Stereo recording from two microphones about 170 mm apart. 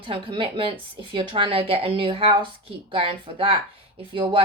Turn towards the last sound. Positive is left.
turn(degrees=-30)  # may be behind; listen again after turning